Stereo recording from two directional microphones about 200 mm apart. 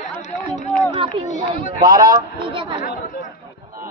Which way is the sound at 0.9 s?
25° right (ahead or behind).